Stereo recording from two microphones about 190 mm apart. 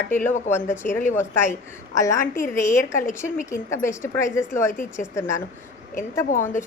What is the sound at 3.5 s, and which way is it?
A woman's voice, 15° left (ahead or behind).